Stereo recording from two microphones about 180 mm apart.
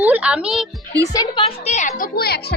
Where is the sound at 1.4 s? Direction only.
35° left (ahead or behind); by 2.5 s 60° left (ahead or behind).